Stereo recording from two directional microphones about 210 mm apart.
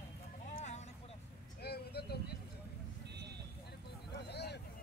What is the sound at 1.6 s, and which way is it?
Vehicle, 50° left (ahead or behind).